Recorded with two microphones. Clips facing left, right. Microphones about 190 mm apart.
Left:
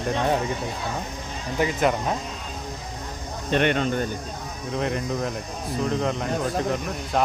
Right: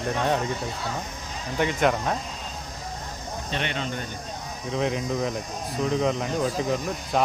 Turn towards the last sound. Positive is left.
turn(degrees=0)  # may be behind; listen again after turning